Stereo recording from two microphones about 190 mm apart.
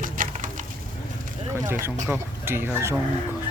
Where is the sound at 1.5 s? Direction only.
15° right (ahead or behind).